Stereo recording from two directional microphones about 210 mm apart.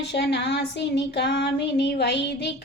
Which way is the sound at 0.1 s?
55° left (ahead or behind).